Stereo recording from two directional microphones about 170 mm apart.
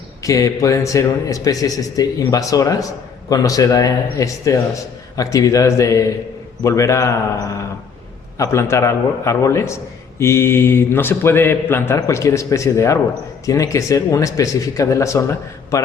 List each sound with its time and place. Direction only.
0.2 s a man's voice: 20° left (ahead or behind)